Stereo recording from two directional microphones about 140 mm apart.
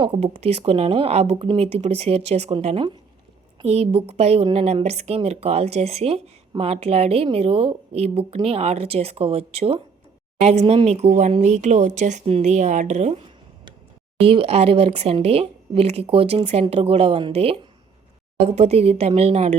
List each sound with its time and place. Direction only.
0.0 s speech: 45° right (ahead or behind)
14.2 s speech: 40° right (ahead or behind)